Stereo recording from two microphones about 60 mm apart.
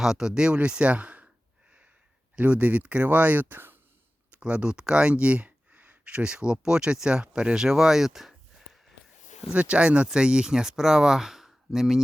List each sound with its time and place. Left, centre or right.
0.0 s speech: centre
2.3 s speech: right
4.3 s speech: centre
9.5 s speech: right